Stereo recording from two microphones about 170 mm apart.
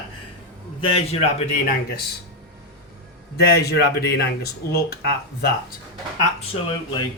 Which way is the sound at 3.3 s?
70° left (ahead or behind).